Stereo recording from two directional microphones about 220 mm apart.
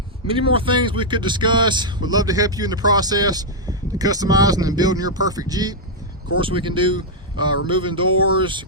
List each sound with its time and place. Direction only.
0.3 s speech: 25° right (ahead or behind)